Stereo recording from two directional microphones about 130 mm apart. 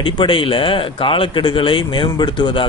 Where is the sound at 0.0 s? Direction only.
40° left (ahead or behind).